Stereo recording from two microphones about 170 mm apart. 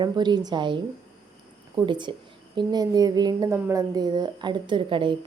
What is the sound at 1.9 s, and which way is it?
A woman's voice, 25° right (ahead or behind).